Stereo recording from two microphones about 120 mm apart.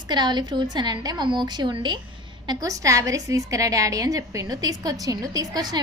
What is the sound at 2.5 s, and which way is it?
A woman's voice, 30° right (ahead or behind).